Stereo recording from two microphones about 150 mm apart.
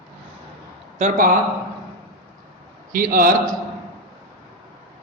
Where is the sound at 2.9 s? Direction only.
70° right (ahead or behind).